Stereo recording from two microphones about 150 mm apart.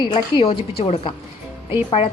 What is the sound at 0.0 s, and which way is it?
A woman's voice, 30° left (ahead or behind).